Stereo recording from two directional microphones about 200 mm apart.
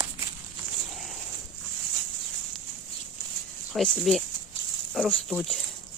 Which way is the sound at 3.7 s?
Centre (ahead or behind).